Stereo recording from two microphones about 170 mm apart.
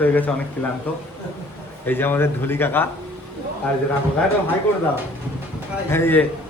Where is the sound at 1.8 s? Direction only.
10° left (ahead or behind).